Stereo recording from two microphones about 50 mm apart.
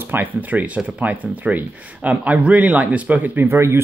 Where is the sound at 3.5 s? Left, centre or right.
Right.